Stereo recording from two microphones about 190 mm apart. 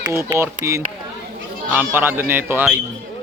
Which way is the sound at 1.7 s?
10° right (ahead or behind).